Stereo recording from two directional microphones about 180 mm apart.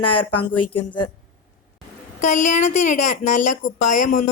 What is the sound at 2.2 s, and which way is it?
Speech, 45° left (ahead or behind).